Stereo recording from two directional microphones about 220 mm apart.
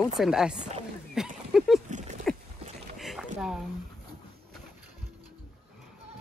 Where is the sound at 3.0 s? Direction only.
Centre (ahead or behind).